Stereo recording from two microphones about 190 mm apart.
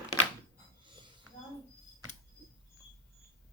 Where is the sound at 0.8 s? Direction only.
25° right (ahead or behind).